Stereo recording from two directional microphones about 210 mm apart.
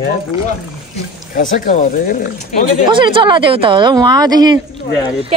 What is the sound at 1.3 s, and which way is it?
Speech, 40° left (ahead or behind).